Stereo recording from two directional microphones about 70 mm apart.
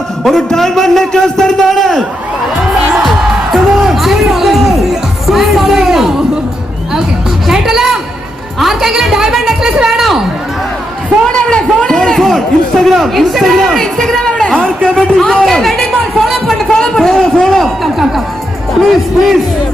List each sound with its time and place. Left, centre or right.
0.3 s a man's voice: centre
3.5 s music: centre
7.4 s music: centre
8.5 s a woman's voice: centre
10.0 s a sound: centre
11.3 s a sound: centre
12.8 s a man's voice: centre
14.5 s a man's voice: centre
14.9 s a man's voice: centre